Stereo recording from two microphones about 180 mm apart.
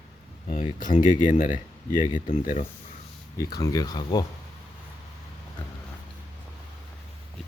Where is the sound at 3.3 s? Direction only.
20° left (ahead or behind).